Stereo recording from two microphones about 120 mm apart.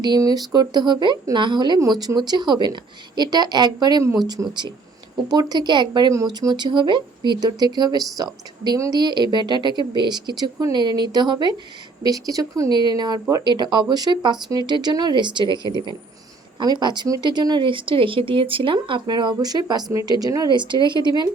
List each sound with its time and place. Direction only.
0.0 s speech: 35° right (ahead or behind)
4.4 s speech: 15° right (ahead or behind)
5.3 s speech: 35° right (ahead or behind)